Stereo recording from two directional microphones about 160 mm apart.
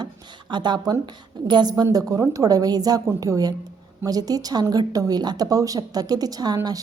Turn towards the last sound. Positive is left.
turn(degrees=-25)  # may be behind; listen again after turning